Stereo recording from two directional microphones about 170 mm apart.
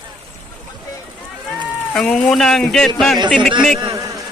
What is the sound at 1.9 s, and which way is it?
Speech, 5° left (ahead or behind).